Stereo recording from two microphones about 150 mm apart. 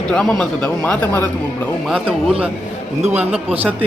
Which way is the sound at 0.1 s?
5° left (ahead or behind).